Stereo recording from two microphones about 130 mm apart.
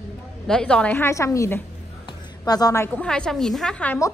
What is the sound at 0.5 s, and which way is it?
A woman's voice, 5° left (ahead or behind).